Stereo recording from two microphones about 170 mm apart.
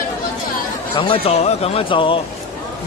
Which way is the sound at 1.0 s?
35° left (ahead or behind).